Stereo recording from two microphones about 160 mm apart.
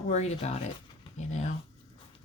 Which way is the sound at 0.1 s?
45° left (ahead or behind).